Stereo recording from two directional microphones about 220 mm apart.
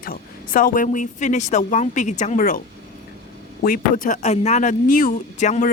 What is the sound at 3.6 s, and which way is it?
Speech, 40° left (ahead or behind).